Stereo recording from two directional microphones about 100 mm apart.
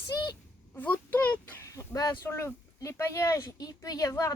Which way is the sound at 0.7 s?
15° left (ahead or behind).